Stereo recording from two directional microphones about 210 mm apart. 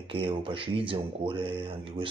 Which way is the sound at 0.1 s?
25° right (ahead or behind).